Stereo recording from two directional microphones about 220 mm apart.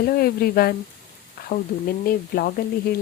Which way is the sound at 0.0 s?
45° left (ahead or behind).